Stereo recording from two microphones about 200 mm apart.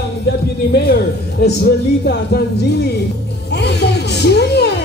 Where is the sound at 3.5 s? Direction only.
55° left (ahead or behind).